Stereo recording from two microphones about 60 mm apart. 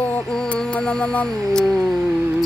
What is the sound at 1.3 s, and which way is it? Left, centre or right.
Music, centre.